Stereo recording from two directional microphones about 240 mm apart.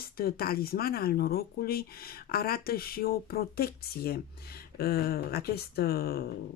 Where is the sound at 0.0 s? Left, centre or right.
Left.